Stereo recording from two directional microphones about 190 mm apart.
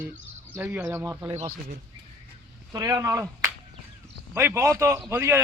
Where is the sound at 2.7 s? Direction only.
20° right (ahead or behind).